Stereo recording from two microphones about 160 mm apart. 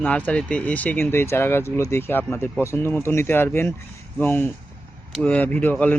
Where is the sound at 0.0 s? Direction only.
10° left (ahead or behind).